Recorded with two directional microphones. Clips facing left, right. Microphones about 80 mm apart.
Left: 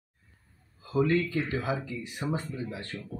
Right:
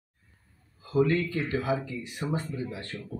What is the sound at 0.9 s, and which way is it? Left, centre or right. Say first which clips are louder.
Speech: right 1 dB; left.